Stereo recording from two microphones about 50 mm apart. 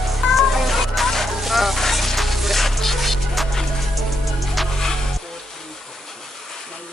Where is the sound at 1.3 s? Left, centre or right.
Centre.